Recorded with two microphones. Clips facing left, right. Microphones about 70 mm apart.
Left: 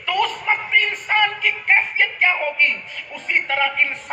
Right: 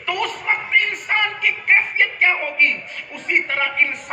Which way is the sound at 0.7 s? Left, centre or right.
Right.